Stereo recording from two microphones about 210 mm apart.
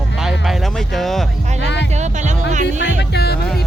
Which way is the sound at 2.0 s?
35° right (ahead or behind).